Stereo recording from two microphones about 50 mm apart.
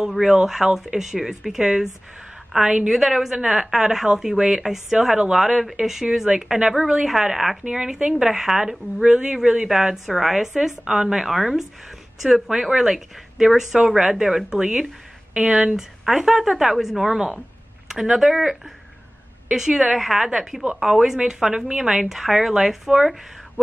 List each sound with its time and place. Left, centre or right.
0.2 s a woman's voice: centre
2.9 s a woman's voice: centre
19.5 s a woman's voice: centre
22.0 s a woman's voice: centre